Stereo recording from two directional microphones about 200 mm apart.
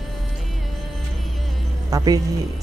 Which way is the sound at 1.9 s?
20° right (ahead or behind).